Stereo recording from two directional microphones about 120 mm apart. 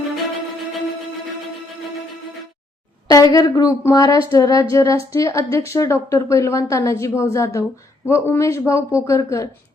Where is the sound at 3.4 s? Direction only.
30° left (ahead or behind).